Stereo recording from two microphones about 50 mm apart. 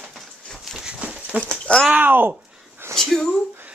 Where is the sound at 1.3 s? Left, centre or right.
Right.